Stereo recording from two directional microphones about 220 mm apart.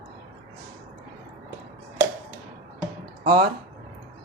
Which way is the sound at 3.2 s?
20° right (ahead or behind).